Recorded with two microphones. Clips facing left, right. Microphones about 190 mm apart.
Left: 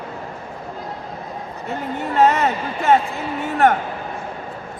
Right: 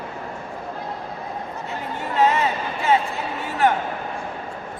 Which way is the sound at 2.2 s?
45° left (ahead or behind).